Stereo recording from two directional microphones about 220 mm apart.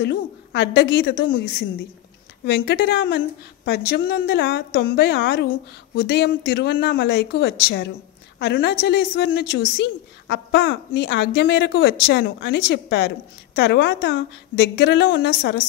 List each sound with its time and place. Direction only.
0.0 s a woman's voice: 50° left (ahead or behind)